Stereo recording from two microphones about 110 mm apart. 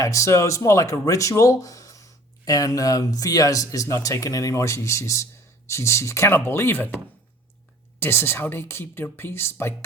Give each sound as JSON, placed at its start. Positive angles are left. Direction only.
{"t": 0.0, "sound": "speech", "side_deg": 30}
{"t": 7.9, "sound": "speech", "side_deg": 20}